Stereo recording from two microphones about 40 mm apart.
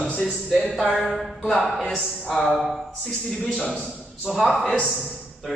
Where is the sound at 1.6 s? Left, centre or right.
Centre.